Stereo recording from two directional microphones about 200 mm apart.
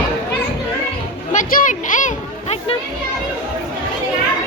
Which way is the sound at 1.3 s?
40° left (ahead or behind).